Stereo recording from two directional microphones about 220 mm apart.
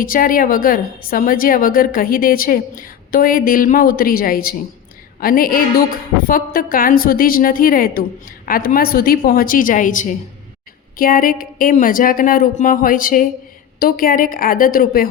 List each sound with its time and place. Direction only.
0.0 s a woman's voice: 40° left (ahead or behind)